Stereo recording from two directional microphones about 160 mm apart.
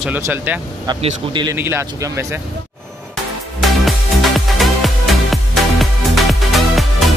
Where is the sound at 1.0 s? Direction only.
30° right (ahead or behind).